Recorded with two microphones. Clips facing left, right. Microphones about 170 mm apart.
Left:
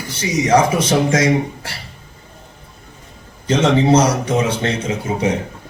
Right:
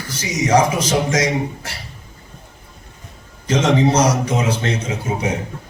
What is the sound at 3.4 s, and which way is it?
A man's voice, 30° left (ahead or behind).